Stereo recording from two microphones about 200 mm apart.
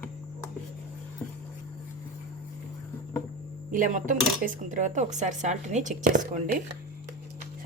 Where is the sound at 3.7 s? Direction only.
40° right (ahead or behind).